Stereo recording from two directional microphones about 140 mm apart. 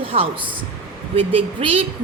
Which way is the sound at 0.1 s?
55° right (ahead or behind).